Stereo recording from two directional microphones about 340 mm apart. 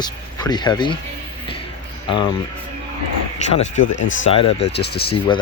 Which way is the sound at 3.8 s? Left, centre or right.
Left.